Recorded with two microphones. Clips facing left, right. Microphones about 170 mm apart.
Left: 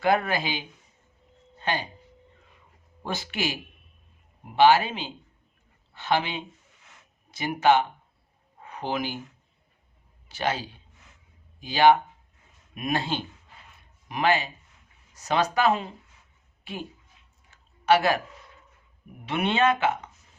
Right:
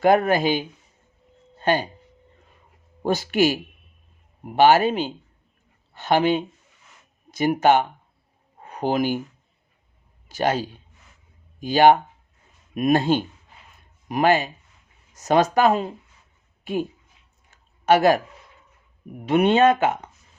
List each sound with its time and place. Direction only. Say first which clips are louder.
0.0 s speech: right 7 dB; 45° right (ahead or behind)
3.0 s speech: right 11 dB; 45° right (ahead or behind)
10.2 s a man's voice: right 6 dB; 45° right (ahead or behind)
17.8 s speech: right 5 dB; 45° right (ahead or behind)
19.2 s speech: right 7 dB; 45° right (ahead or behind)